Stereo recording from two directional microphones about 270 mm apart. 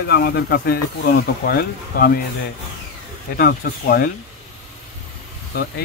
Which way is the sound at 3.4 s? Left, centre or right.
Left.